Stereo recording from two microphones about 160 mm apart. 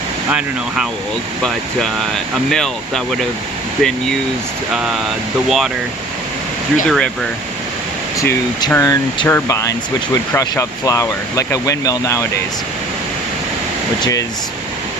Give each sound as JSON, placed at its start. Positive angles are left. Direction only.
{"t": 0.3, "sound": "speech", "side_deg": -10}
{"t": 2.5, "sound": "speech", "side_deg": 0}
{"t": 5.5, "sound": "speech", "side_deg": 0}
{"t": 6.8, "sound": "speech", "side_deg": 5}
{"t": 8.2, "sound": "speech", "side_deg": 15}
{"t": 14.0, "sound": "speech", "side_deg": 20}